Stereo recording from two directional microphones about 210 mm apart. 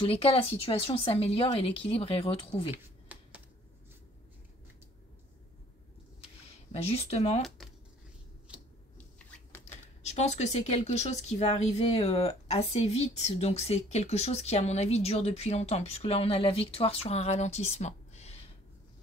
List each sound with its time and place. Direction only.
0.0 s a woman's voice: 25° left (ahead or behind)
2.7 s a sound: 5° right (ahead or behind)
6.7 s a woman's voice: 30° left (ahead or behind)
7.4 s speech: centre (ahead or behind)
10.0 s a woman's voice: 30° left (ahead or behind)